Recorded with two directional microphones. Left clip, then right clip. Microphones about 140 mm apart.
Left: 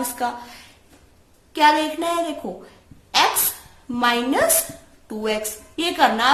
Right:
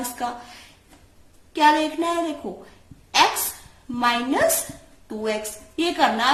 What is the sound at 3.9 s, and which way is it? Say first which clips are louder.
A woman's voice: left 2 dB; 35° left (ahead or behind).